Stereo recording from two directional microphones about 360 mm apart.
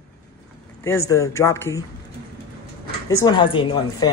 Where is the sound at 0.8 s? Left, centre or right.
Centre.